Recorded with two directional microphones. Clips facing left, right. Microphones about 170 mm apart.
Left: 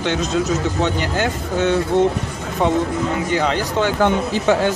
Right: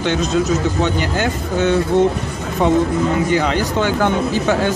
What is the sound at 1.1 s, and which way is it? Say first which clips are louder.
Speech: right 1 dB; 25° left (ahead or behind).